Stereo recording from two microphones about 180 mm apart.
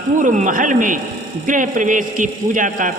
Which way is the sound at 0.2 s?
45° right (ahead or behind).